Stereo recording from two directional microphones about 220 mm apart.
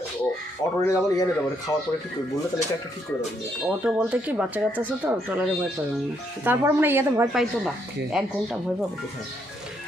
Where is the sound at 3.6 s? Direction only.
5° right (ahead or behind).